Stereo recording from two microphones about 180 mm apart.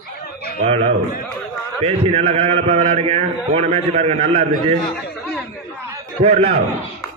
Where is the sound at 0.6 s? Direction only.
35° right (ahead or behind).